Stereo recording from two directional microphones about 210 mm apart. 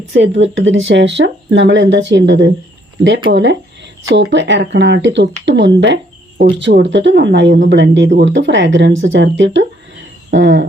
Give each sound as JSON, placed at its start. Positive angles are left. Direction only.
{"t": 0.1, "sound": "speech", "side_deg": -60}